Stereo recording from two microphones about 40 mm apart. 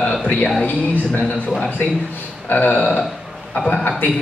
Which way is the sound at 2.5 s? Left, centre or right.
Left.